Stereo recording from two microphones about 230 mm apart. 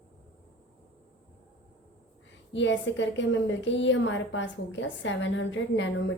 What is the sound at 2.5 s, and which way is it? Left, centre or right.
A woman's voice, left.